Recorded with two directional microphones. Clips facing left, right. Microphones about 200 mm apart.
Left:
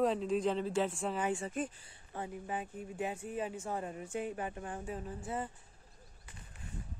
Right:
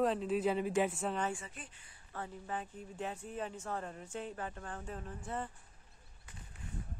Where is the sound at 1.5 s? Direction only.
45° left (ahead or behind).